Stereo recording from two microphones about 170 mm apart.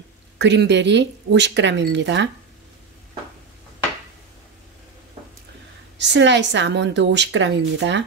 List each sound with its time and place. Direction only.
0.4 s a woman's voice: 90° right
5.9 s a woman's voice: 90° right